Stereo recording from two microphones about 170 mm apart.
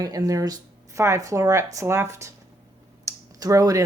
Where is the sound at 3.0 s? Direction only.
20° right (ahead or behind).